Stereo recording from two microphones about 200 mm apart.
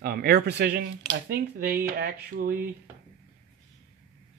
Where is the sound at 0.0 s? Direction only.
50° right (ahead or behind).